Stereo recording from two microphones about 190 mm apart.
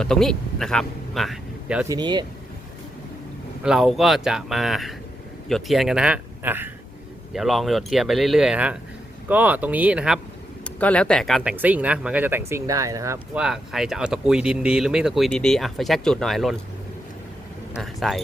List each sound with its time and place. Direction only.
0.0 s speech: 5° left (ahead or behind)
1.9 s speech: 25° right (ahead or behind)
3.6 s speech: centre (ahead or behind)
10.6 s speech: 5° left (ahead or behind); by 13.4 s 15° right (ahead or behind)
13.4 s speech: centre (ahead or behind)
17.7 s speech: centre (ahead or behind)